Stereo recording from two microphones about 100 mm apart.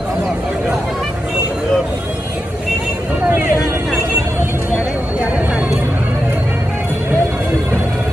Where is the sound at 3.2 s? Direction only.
20° right (ahead or behind).